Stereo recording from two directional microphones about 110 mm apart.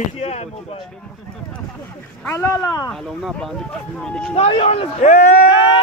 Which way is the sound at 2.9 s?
Centre (ahead or behind).